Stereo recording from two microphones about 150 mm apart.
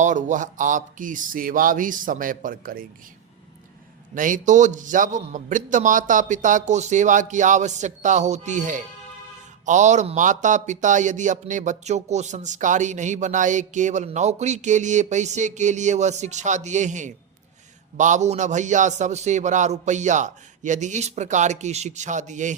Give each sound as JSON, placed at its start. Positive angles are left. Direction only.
{"t": 0.0, "sound": "a man's voice", "side_deg": -55}
{"t": 4.1, "sound": "a man's voice", "side_deg": -60}